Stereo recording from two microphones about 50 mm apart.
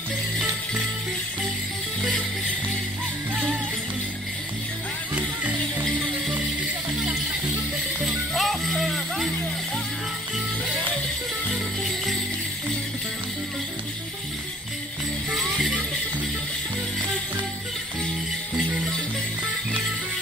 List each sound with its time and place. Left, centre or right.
5.1 s music: right
8.4 s music: centre
15.3 s music: centre